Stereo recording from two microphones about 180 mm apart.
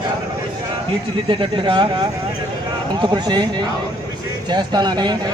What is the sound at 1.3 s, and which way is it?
Speech, 30° right (ahead or behind).